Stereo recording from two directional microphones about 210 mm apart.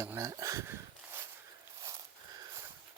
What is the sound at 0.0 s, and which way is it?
Speech, 15° right (ahead or behind).